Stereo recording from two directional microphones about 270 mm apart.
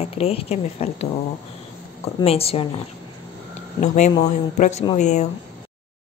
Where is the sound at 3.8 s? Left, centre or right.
Left.